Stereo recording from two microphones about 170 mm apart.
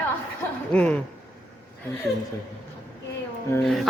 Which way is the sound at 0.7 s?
10° left (ahead or behind).